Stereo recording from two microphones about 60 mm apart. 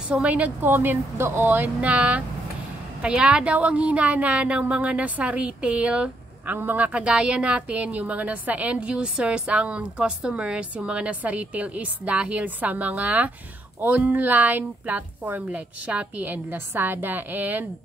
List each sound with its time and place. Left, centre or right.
0.1 s a woman's voice: centre
0.4 s a woman's voice: right
6.9 s a woman's voice: right
15.9 s a woman's voice: centre
16.3 s speech: right